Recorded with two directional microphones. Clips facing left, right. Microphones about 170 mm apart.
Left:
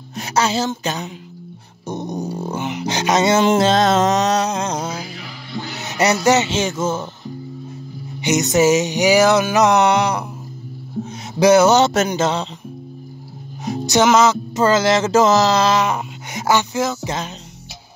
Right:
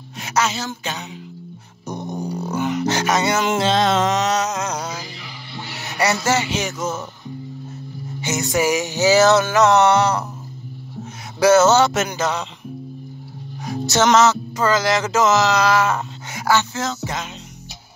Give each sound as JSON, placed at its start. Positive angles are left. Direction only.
{"t": 0.2, "sound": "speech", "side_deg": 30}
{"t": 1.9, "sound": "dog", "side_deg": 20}
{"t": 3.4, "sound": "music", "side_deg": 45}
{"t": 5.8, "sound": "speech", "side_deg": 20}
{"t": 8.2, "sound": "music", "side_deg": 20}
{"t": 11.3, "sound": "music", "side_deg": 15}
{"t": 12.1, "sound": "speech", "side_deg": 25}
{"t": 13.7, "sound": "music", "side_deg": 15}
{"t": 14.5, "sound": "speech", "side_deg": 25}